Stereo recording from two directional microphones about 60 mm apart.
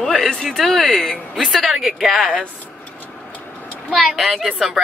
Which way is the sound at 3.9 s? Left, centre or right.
Centre.